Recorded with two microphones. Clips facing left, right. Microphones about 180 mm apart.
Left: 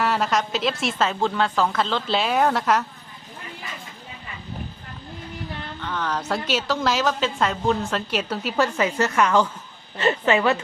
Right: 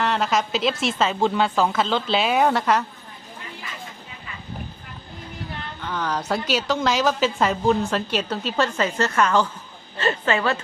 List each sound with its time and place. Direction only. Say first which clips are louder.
0.0 s a woman's voice: even; centre (ahead or behind)
5.8 s a woman's voice: right 1 dB; centre (ahead or behind); by 10.6 s 15° left (ahead or behind)